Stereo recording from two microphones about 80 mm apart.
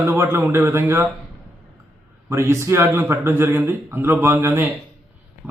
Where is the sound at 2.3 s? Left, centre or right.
Right.